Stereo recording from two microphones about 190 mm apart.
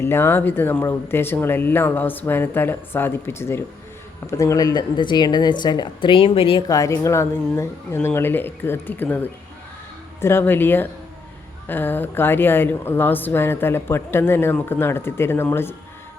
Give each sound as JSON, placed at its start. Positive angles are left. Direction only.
{"t": 0.0, "sound": "a woman's voice", "side_deg": 10}
{"t": 6.7, "sound": "speech", "side_deg": 15}